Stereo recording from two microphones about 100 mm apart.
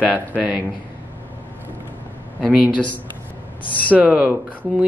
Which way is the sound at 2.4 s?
5° left (ahead or behind).